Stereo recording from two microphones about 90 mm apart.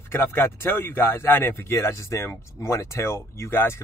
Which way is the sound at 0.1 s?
25° left (ahead or behind).